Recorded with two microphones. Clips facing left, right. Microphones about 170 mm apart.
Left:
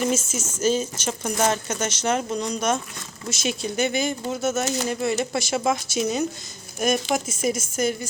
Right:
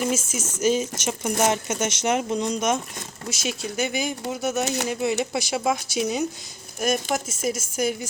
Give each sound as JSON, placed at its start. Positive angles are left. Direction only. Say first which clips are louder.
{"t": 0.0, "sound": "speech", "louder": "left 1 dB", "side_deg": -10}
{"t": 3.2, "sound": "speech", "louder": "left 3 dB", "side_deg": -5}